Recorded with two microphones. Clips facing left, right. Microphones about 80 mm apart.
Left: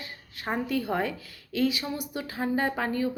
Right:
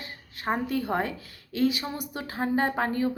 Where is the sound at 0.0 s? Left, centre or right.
Right.